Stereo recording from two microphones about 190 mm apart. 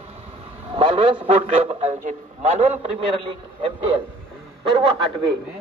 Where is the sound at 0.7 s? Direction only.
30° right (ahead or behind).